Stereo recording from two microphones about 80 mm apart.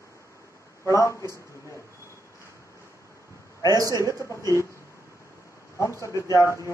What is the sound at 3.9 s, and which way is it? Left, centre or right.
Speech, left.